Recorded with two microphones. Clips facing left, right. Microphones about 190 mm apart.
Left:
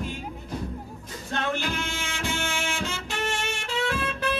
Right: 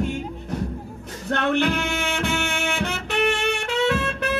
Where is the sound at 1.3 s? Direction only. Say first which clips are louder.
Right 8 dB; 65° right (ahead or behind).